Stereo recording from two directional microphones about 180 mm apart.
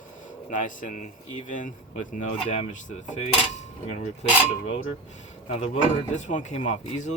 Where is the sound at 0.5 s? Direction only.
45° left (ahead or behind).